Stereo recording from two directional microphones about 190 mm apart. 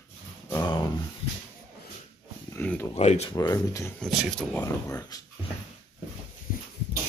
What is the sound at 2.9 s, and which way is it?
Speech, 35° left (ahead or behind).